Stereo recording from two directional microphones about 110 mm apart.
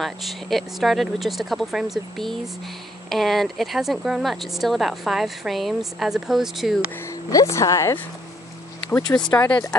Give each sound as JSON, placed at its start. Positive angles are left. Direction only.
{"t": 0.0, "sound": "speech", "side_deg": 0}
{"t": 7.1, "sound": "speech", "side_deg": 30}
{"t": 9.2, "sound": "speech", "side_deg": 15}